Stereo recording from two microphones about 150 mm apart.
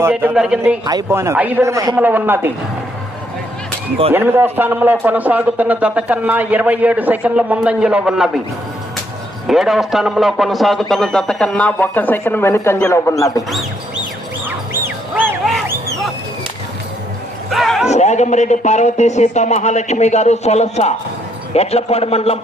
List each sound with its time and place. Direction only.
0.0 s a man's voice: 15° right (ahead or behind)
0.9 s speech: 20° right (ahead or behind)
2.0 s a man's voice: 10° right (ahead or behind)
4.1 s a man's voice: 15° right (ahead or behind)
9.5 s a man's voice: centre (ahead or behind); by 13.4 s 20° left (ahead or behind)
14.4 s duck: 15° right (ahead or behind)
17.5 s a man's voice: centre (ahead or behind)
17.8 s a man's voice: 50° left (ahead or behind)